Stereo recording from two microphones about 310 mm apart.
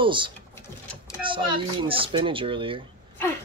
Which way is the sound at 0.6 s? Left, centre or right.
Centre.